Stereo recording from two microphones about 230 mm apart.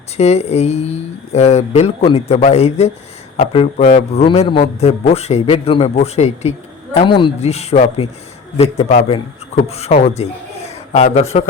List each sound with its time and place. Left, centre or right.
0.2 s a man's voice: left